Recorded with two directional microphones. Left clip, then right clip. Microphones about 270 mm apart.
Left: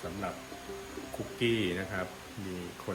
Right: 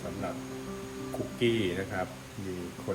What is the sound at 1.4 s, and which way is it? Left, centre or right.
Speech, centre.